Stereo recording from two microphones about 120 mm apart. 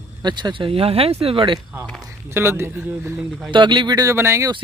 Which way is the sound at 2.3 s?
20° right (ahead or behind).